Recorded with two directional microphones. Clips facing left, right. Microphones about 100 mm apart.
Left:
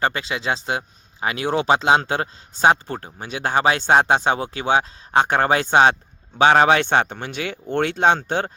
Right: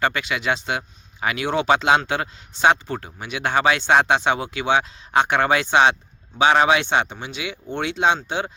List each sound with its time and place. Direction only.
0.0 s speech: 30° left (ahead or behind); by 8.5 s 50° left (ahead or behind)